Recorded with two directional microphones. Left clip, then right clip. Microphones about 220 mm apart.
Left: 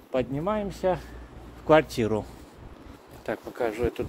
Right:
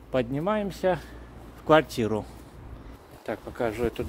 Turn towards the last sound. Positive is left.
turn(degrees=-10)  # may be behind; listen again after turning